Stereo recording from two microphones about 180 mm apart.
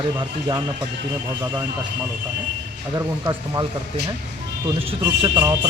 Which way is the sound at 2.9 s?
20° right (ahead or behind).